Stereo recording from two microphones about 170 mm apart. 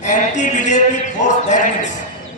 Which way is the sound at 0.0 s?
45° left (ahead or behind).